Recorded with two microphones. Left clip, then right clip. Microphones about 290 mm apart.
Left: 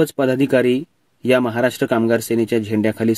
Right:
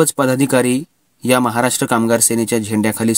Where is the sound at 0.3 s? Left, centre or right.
Right.